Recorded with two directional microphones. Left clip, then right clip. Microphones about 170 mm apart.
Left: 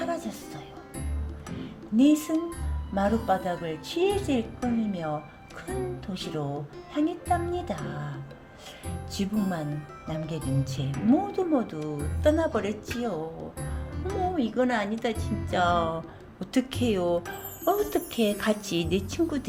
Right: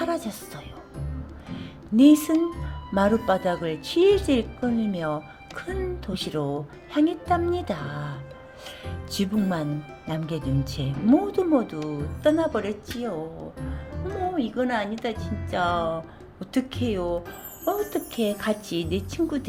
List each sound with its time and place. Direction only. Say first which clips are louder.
0.0 s music: right 4 dB; 25° right (ahead or behind)
2.0 s speech: right 5 dB; 30° right (ahead or behind)
9.1 s speech: right 4 dB; 30° right (ahead or behind)
12.2 s speech: right 2 dB; 10° right (ahead or behind)